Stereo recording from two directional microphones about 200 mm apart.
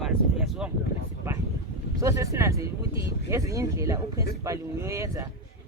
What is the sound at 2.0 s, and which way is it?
A man's voice, 15° right (ahead or behind).